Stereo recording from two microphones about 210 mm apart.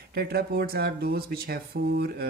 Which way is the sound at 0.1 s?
50° right (ahead or behind).